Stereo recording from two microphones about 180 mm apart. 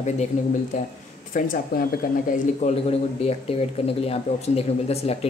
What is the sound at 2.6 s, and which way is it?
Speech, 35° left (ahead or behind).